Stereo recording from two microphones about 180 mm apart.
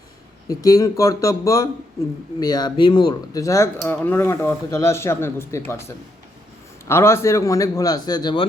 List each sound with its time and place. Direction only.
0.4 s a man's voice: 20° left (ahead or behind)
6.8 s a man's voice: 15° left (ahead or behind)